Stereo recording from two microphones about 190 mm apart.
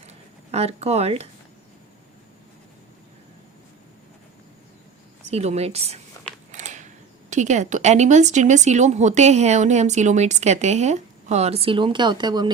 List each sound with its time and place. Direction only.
0.5 s speech: 35° right (ahead or behind)
5.3 s speech: 35° right (ahead or behind)